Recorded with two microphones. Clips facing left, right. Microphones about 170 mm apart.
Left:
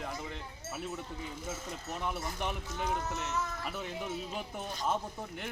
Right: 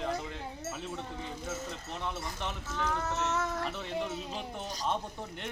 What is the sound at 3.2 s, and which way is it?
Speech, 80° right.